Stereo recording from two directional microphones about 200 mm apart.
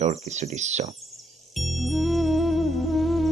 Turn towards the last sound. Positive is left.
turn(degrees=0)  # may be behind; listen again after turning